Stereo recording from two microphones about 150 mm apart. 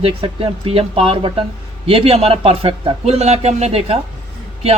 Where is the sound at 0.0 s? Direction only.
40° right (ahead or behind).